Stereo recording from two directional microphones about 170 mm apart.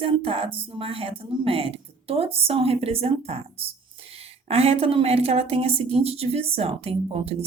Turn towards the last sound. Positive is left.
turn(degrees=-35)  # may be behind; listen again after turning